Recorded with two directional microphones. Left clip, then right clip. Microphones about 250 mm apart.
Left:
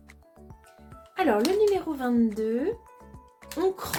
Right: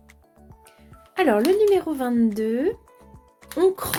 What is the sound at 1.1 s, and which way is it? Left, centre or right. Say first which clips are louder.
Speech: right 5 dB; right.